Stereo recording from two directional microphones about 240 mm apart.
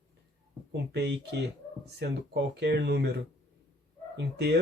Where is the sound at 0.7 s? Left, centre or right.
Right.